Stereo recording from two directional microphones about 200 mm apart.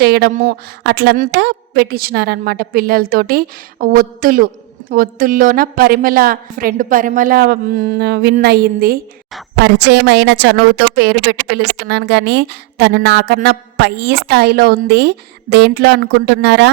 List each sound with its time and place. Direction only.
0.0 s a woman's voice: 50° right (ahead or behind)